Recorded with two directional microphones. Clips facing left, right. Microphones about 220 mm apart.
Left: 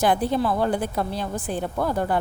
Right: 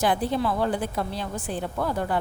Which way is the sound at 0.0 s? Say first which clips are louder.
Left 3 dB; 45° left (ahead or behind).